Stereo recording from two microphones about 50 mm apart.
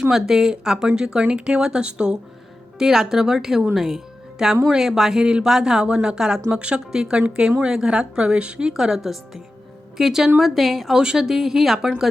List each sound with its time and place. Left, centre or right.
0.1 s speech: centre
3.8 s music: centre
4.6 s speech: centre
10.9 s speech: centre